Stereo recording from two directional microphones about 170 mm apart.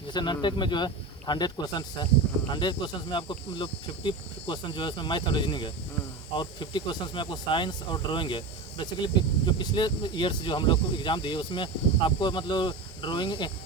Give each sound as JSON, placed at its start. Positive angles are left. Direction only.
{"t": 0.1, "sound": "speech", "side_deg": 25}